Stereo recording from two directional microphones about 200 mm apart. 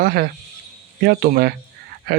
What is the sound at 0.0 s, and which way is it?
Speech, 50° right (ahead or behind).